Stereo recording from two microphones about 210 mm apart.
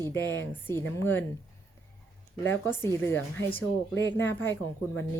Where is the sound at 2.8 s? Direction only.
10° left (ahead or behind).